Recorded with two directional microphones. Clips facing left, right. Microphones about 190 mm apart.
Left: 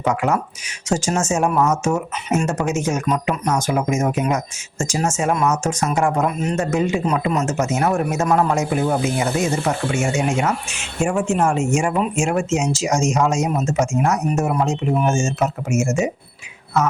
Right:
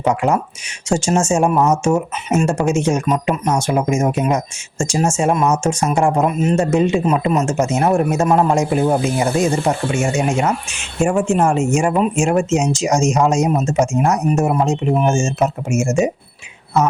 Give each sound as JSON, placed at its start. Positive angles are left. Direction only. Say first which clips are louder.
{"t": 0.0, "sound": "speech", "louder": "right 3 dB", "side_deg": -30}
{"t": 11.0, "sound": "speech", "louder": "right 3 dB", "side_deg": -35}